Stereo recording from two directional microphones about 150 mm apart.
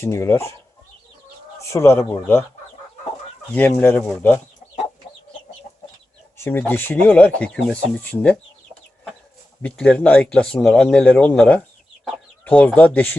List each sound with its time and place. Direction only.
0.0 s speech: 15° left (ahead or behind)
1.7 s speech: 15° left (ahead or behind)
3.5 s speech: 10° left (ahead or behind)
6.3 s speech: 15° left (ahead or behind)
9.6 s speech: 10° left (ahead or behind)